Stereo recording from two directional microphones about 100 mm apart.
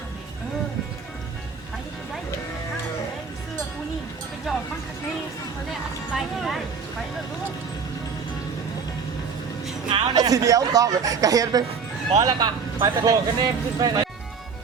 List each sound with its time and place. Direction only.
4.5 s a sound: 5° right (ahead or behind)
6.1 s music: centre (ahead or behind)
9.9 s speech: 45° right (ahead or behind)